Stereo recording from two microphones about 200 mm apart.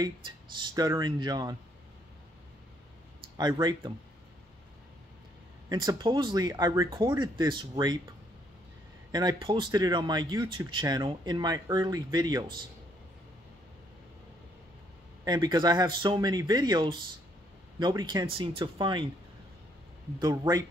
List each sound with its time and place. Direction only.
0.6 s speech: 20° right (ahead or behind)
3.3 s speech: 20° right (ahead or behind)
5.7 s speech: 20° right (ahead or behind)
9.1 s speech: 20° right (ahead or behind)
15.2 s speech: 20° right (ahead or behind)
20.2 s speech: 20° right (ahead or behind)